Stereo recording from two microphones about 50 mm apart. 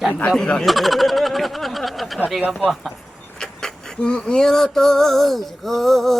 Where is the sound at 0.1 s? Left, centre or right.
Left.